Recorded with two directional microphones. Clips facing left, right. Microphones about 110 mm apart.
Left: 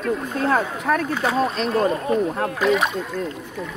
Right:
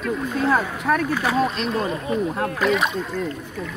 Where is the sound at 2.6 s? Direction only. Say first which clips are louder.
Left 2 dB; 25° left (ahead or behind).